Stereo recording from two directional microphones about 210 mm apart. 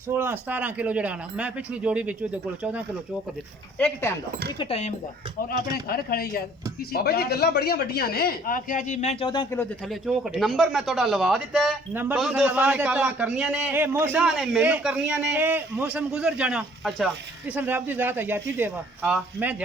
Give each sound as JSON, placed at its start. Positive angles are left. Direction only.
{"t": 0.1, "sound": "speech", "side_deg": -10}
{"t": 3.8, "sound": "speech", "side_deg": 10}
{"t": 4.5, "sound": "speech", "side_deg": 25}
{"t": 5.9, "sound": "speech", "side_deg": 45}
{"t": 9.3, "sound": "speech", "side_deg": 15}
{"t": 9.9, "sound": "speech", "side_deg": 0}